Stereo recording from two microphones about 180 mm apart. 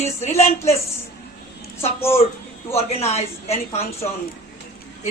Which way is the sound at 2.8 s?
35° left (ahead or behind).